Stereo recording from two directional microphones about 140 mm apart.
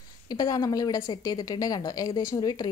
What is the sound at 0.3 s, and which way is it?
A woman's voice, 25° left (ahead or behind).